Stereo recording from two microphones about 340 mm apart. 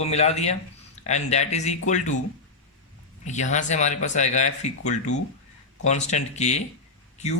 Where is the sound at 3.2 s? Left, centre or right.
Left.